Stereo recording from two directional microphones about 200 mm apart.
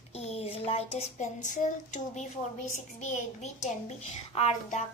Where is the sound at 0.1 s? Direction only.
30° left (ahead or behind).